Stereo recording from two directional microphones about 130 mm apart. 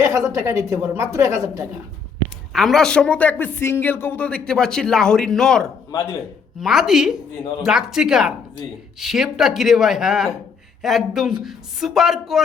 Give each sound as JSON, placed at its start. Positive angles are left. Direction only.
{"t": 0.0, "sound": "a woman's voice", "side_deg": -25}
{"t": 2.5, "sound": "a woman's voice", "side_deg": 0}
{"t": 5.9, "sound": "speech", "side_deg": 20}
{"t": 6.6, "sound": "a woman's voice", "side_deg": 0}